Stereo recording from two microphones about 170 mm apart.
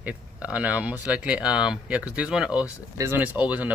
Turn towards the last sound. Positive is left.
turn(degrees=-10)  # may be behind; listen again after turning